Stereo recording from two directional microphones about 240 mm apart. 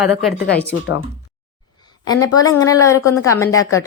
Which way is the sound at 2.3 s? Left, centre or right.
Centre.